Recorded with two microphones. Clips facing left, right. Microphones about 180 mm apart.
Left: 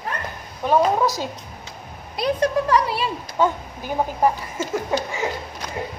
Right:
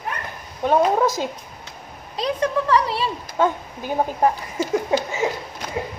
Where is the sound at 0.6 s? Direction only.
20° right (ahead or behind).